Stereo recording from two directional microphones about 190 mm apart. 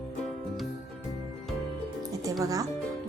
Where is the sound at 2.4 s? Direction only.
20° right (ahead or behind).